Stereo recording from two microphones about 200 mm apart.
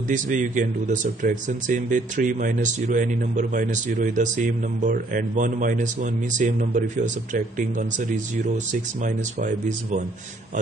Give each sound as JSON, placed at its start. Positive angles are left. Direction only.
{"t": 0.1, "sound": "speech", "side_deg": -40}